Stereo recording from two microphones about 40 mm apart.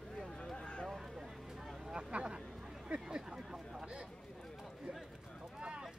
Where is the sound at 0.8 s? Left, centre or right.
Centre.